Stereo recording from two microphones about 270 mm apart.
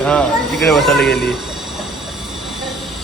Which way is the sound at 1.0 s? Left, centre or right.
Left.